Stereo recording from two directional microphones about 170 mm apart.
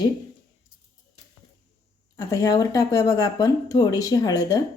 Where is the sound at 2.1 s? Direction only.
20° left (ahead or behind).